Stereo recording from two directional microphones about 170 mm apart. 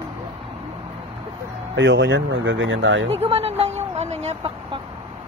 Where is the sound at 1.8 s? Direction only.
90° right.